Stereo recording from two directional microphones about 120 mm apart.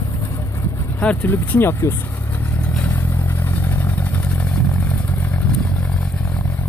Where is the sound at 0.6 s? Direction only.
10° left (ahead or behind).